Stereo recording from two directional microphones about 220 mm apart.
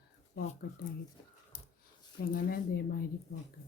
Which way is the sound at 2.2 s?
45° left (ahead or behind).